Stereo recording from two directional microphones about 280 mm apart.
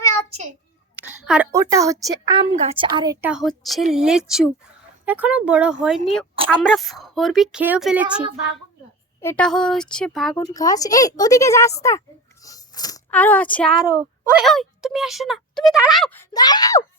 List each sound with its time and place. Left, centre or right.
1.2 s a woman's voice: centre
10.4 s a woman's voice: centre
13.7 s a woman's voice: centre
14.4 s speech: centre